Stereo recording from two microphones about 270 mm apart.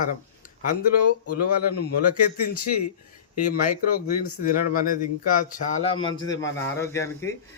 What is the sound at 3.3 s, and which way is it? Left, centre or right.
Speech, left.